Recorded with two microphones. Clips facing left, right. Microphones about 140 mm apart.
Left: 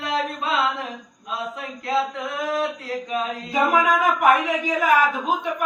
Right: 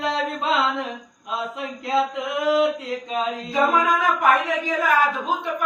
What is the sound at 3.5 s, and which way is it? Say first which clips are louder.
Speech: left 1 dB; 10° left (ahead or behind).